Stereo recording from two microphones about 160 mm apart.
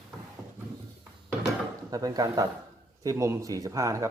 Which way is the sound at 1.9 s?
25° right (ahead or behind).